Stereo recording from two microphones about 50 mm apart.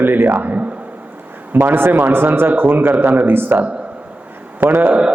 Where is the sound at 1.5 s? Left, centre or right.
Right.